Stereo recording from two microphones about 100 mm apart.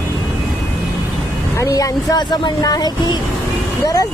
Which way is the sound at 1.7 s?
35° left (ahead or behind).